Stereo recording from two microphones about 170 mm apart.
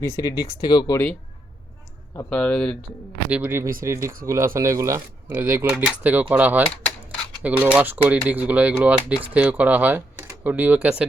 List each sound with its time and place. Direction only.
0.0 s speech: 20° left (ahead or behind)
2.3 s speech: 5° left (ahead or behind)
3.2 s speech: 10° right (ahead or behind)